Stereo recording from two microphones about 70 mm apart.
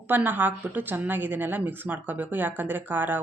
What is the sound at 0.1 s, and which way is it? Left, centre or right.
Speech, right.